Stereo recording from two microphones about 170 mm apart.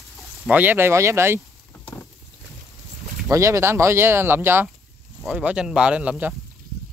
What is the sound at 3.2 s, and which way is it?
Speech, 15° right (ahead or behind).